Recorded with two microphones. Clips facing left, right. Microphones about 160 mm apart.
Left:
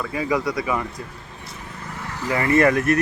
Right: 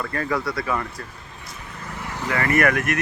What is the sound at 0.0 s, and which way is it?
Speech, 10° left (ahead or behind).